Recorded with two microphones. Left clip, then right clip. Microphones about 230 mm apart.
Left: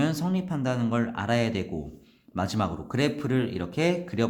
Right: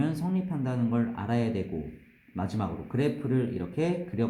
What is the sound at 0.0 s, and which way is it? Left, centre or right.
Speech, left.